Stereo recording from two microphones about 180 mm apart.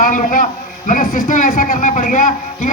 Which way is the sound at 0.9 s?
50° left (ahead or behind).